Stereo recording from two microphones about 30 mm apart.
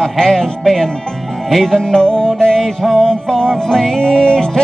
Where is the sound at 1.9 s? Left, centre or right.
Left.